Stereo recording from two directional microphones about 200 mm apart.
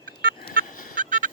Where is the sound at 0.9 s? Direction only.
40° right (ahead or behind).